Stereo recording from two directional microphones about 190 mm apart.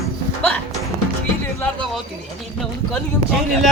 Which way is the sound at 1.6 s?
5° left (ahead or behind).